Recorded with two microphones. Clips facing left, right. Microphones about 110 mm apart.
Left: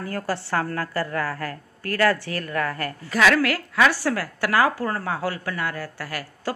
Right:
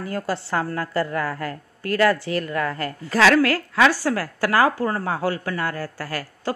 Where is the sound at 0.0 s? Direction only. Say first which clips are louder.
Right 1 dB; 20° right (ahead or behind).